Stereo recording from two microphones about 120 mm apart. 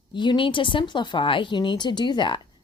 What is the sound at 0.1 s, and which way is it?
A woman's voice, 40° left (ahead or behind).